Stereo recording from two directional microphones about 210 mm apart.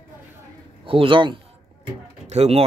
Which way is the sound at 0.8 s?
25° right (ahead or behind).